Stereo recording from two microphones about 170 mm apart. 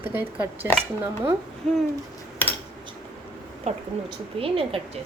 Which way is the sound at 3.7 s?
40° right (ahead or behind).